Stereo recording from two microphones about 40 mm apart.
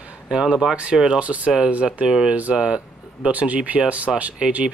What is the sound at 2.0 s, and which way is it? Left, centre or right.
Speech, right.